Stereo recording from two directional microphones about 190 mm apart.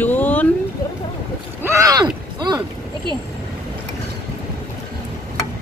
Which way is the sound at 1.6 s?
15° right (ahead or behind).